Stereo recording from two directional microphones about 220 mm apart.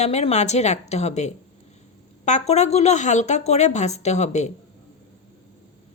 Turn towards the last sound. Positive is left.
turn(degrees=30)  # may be behind; listen again after turning